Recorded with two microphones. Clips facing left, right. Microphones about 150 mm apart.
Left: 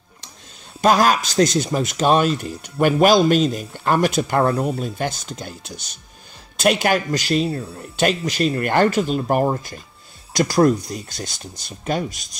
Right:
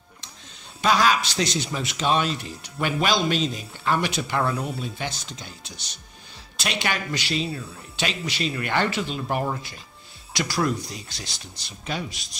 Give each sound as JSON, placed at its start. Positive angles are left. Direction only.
{"t": 0.7, "sound": "speech", "side_deg": 45}